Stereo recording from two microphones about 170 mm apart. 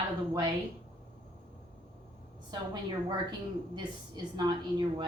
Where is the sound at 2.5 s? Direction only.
25° right (ahead or behind).